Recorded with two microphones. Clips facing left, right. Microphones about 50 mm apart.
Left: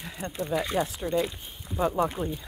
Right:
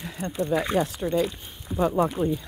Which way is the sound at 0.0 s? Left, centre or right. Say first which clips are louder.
Right 3 dB; centre.